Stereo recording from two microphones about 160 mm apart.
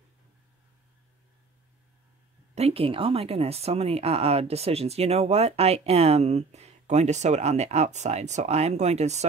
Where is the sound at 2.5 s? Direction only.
40° right (ahead or behind).